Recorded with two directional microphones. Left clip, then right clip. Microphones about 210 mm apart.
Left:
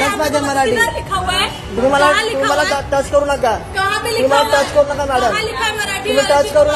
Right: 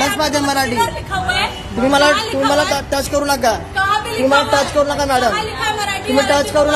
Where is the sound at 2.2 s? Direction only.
25° right (ahead or behind).